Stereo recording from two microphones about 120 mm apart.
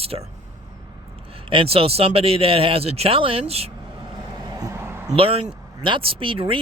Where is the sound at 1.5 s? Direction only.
50° right (ahead or behind).